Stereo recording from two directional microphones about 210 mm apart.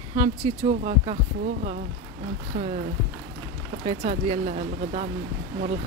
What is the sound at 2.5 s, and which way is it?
Speech, 30° right (ahead or behind).